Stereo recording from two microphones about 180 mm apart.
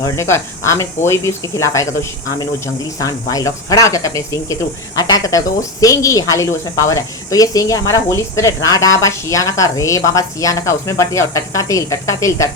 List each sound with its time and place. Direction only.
0.0 s a woman's voice: 15° left (ahead or behind)